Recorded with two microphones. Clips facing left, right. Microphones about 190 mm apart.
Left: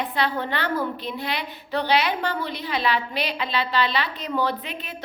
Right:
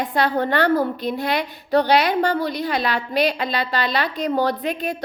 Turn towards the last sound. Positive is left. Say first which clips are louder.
# right 10 dB
turn(degrees=-40)  # may be behind; listen again after turning